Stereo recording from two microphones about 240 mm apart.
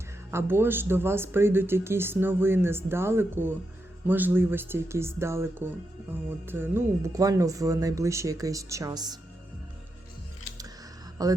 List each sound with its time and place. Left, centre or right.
0.3 s speech: centre
11.2 s speech: centre